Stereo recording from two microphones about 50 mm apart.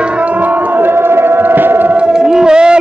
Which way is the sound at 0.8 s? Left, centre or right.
Right.